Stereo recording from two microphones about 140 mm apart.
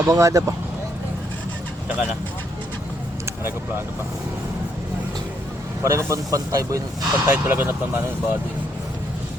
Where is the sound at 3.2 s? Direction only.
15° right (ahead or behind).